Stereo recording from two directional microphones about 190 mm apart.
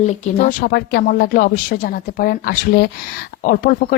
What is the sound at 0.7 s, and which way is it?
Speech, 55° left (ahead or behind).